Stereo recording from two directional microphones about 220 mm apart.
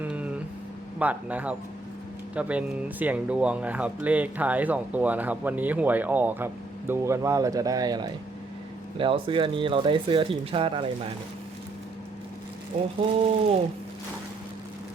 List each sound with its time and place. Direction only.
0.0 s a sound: 5° right (ahead or behind)
0.9 s speech: 5° right (ahead or behind); by 11.1 s 25° right (ahead or behind)
12.7 s speech: 30° right (ahead or behind)